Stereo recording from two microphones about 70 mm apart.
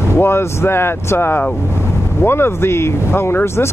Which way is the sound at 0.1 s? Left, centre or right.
Left.